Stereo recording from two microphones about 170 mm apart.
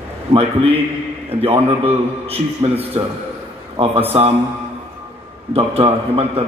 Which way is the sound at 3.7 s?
35° right (ahead or behind).